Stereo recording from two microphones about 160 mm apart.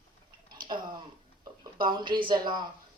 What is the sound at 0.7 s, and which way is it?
Speech, 30° right (ahead or behind).